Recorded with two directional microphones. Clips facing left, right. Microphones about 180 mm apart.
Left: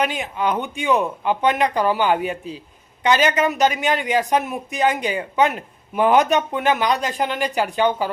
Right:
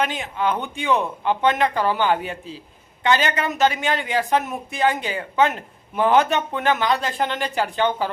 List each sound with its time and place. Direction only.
0.0 s speech: 15° left (ahead or behind)